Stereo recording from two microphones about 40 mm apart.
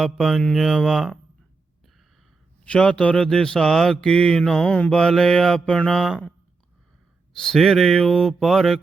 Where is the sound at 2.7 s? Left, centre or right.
Left.